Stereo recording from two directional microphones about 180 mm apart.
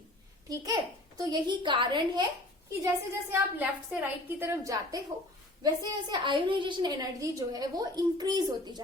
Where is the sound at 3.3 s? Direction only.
10° right (ahead or behind).